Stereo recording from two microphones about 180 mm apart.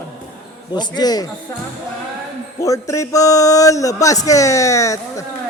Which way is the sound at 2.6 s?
20° left (ahead or behind).